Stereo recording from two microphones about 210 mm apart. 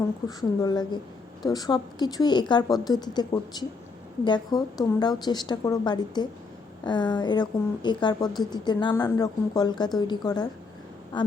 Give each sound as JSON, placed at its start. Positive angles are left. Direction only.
{"t": 0.3, "sound": "a woman's voice", "side_deg": 15}